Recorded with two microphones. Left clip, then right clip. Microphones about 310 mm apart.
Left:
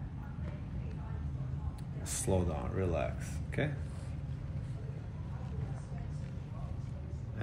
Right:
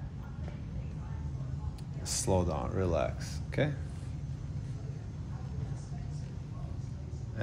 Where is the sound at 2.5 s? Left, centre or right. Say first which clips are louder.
Right 4 dB; right.